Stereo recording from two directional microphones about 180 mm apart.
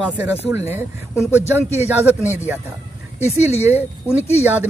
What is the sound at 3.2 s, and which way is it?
Speech, 35° left (ahead or behind).